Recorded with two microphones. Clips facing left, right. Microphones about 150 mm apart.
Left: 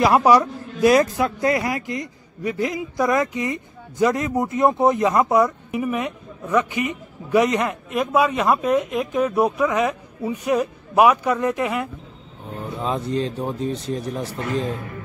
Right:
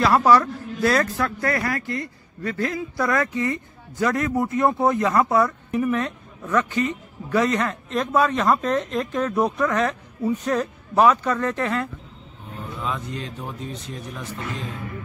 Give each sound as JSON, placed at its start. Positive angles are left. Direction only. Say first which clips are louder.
{"t": 0.0, "sound": "a man's voice", "louder": "left 2 dB", "side_deg": 15}
{"t": 12.7, "sound": "speech", "louder": "left 7 dB", "side_deg": 35}